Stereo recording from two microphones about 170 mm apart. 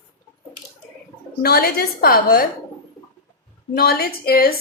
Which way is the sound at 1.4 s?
65° left (ahead or behind).